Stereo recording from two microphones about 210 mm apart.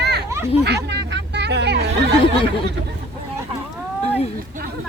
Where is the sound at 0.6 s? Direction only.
50° right (ahead or behind).